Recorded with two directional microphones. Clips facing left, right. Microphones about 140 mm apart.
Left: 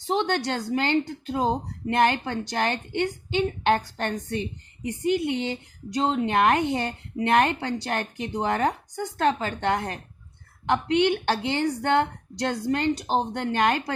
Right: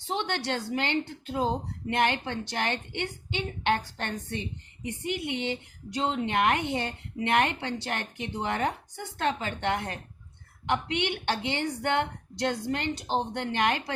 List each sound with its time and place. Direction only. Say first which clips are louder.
0.1 s a woman's voice: left 5 dB; 40° left (ahead or behind)